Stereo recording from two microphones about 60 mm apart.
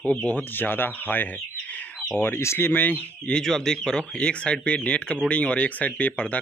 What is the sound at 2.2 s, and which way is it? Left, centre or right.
Speech, left.